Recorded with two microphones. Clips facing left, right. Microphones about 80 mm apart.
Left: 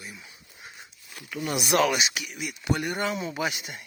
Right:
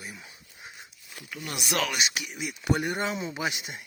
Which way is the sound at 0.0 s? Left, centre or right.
Right.